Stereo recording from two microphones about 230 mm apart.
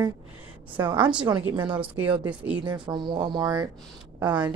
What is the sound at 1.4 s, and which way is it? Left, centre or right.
Speech, centre.